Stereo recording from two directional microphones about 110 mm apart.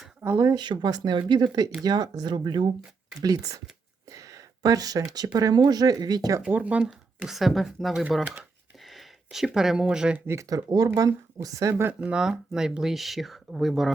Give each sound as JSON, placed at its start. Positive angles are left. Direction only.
{"t": 0.2, "sound": "speech", "side_deg": -25}
{"t": 0.6, "sound": "speech", "side_deg": -40}
{"t": 6.5, "sound": "speech", "side_deg": -15}
{"t": 8.1, "sound": "a sound", "side_deg": 0}
{"t": 10.2, "sound": "speech", "side_deg": -30}